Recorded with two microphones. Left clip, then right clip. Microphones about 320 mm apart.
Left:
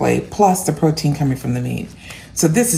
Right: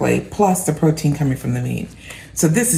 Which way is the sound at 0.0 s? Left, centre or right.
Centre.